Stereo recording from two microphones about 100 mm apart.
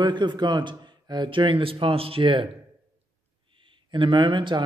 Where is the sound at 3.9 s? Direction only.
50° right (ahead or behind).